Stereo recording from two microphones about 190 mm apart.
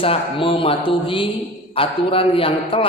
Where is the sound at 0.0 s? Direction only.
30° left (ahead or behind).